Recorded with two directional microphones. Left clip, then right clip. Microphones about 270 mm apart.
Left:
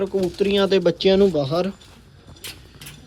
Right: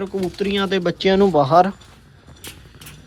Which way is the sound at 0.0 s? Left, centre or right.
Centre.